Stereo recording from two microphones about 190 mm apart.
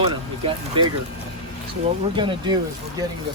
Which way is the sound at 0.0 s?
25° right (ahead or behind).